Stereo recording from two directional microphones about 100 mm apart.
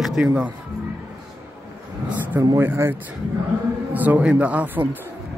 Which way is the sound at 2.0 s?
20° right (ahead or behind).